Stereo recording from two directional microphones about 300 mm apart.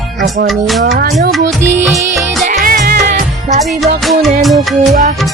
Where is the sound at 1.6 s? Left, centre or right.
Right.